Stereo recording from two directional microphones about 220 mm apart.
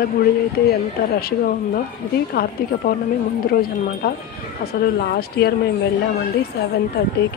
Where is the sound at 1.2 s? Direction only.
45° left (ahead or behind).